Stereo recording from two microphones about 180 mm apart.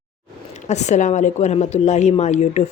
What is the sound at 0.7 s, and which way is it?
Speech, 40° left (ahead or behind).